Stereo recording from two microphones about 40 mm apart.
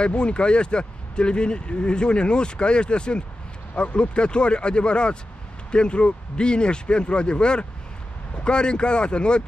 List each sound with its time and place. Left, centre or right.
0.0 s speech: left